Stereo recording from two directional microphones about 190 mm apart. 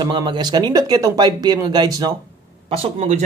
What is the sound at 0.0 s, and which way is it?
Speech, 25° right (ahead or behind).